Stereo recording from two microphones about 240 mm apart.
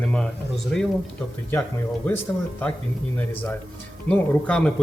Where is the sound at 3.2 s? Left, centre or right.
Centre.